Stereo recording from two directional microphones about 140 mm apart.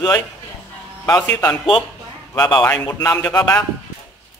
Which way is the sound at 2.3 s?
30° left (ahead or behind).